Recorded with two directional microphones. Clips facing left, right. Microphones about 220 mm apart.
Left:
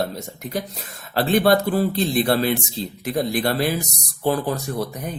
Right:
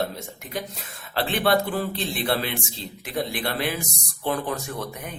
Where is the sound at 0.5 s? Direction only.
40° left (ahead or behind).